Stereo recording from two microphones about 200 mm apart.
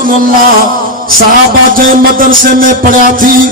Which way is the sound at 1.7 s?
45° right (ahead or behind).